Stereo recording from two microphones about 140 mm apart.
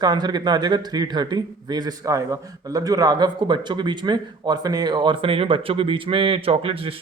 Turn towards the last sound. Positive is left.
turn(degrees=-40)  # may be behind; listen again after turning